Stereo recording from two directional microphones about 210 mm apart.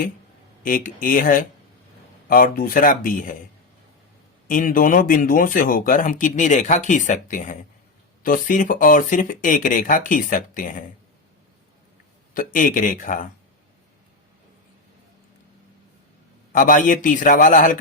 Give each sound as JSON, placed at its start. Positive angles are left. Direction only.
{"t": 0.6, "sound": "speech", "side_deg": 40}
{"t": 4.4, "sound": "speech", "side_deg": 40}
{"t": 12.3, "sound": "speech", "side_deg": 40}
{"t": 16.5, "sound": "speech", "side_deg": 40}